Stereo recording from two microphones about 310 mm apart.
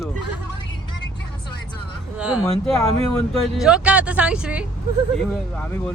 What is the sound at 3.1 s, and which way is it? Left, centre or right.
Speech, centre.